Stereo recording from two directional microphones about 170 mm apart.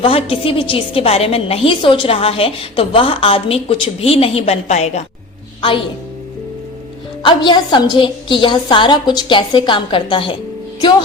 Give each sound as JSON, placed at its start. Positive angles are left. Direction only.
{"t": 0.0, "sound": "a woman's voice", "side_deg": 35}
{"t": 7.2, "sound": "a woman's voice", "side_deg": 25}